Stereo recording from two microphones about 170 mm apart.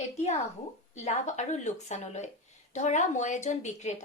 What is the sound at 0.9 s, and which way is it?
A woman's voice, 40° left (ahead or behind).